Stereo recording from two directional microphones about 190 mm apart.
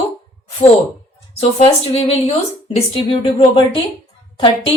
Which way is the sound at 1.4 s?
30° left (ahead or behind).